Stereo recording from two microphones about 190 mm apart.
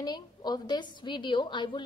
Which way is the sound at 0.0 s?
20° left (ahead or behind).